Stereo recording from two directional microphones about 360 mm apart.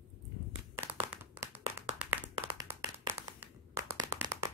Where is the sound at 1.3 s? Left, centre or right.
Centre.